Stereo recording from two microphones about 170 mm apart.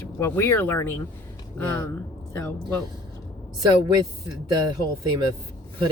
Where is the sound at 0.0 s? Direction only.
15° left (ahead or behind).